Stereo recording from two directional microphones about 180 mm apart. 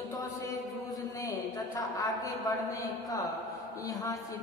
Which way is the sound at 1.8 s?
20° left (ahead or behind).